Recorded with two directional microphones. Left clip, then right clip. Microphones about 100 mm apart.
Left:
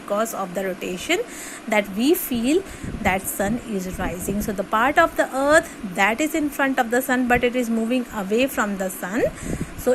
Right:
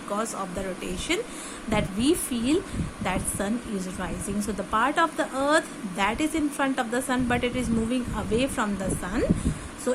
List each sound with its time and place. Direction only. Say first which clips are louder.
0.1 s a woman's voice: left 6 dB; 45° left (ahead or behind)
9.9 s speech: left 7 dB; 35° left (ahead or behind)